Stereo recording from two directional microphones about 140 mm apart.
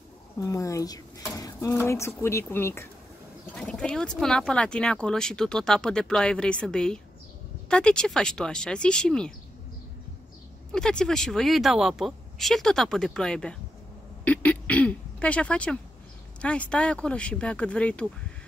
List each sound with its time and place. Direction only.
0.4 s speech: 25° left (ahead or behind)
3.5 s speech: 5° left (ahead or behind)
10.7 s speech: 5° left (ahead or behind)